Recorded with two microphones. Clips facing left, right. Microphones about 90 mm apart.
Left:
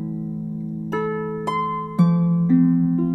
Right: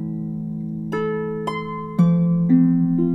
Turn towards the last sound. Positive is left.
turn(degrees=5)  # may be behind; listen again after turning